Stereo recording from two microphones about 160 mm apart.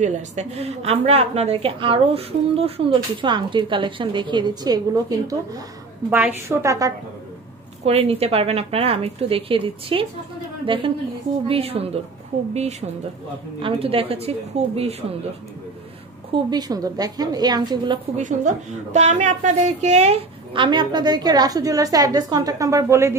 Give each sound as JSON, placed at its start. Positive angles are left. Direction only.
{"t": 0.0, "sound": "a woman's voice", "side_deg": -45}
{"t": 6.0, "sound": "a woman's voice", "side_deg": -10}
{"t": 6.6, "sound": "a woman's voice", "side_deg": -20}
{"t": 7.8, "sound": "a woman's voice", "side_deg": -40}
{"t": 13.6, "sound": "a woman's voice", "side_deg": -35}
{"t": 16.4, "sound": "a woman's voice", "side_deg": -25}
{"t": 18.1, "sound": "a woman's voice", "side_deg": -50}